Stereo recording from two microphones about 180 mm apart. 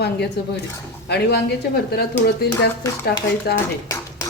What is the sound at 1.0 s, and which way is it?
Speech, 65° left (ahead or behind).